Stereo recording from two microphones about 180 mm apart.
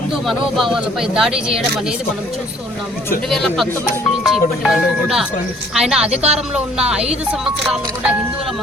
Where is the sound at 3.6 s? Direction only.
10° left (ahead or behind).